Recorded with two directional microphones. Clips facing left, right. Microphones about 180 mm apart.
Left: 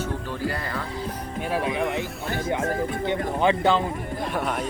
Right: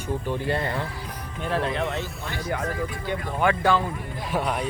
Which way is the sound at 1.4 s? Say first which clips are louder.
Even; 10° left (ahead or behind).